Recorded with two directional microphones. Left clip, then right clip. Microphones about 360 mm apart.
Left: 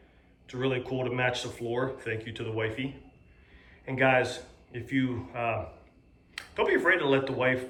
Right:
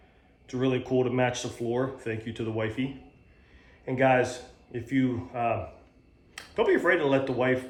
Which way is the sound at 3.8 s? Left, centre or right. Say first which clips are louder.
Right 1 dB; centre.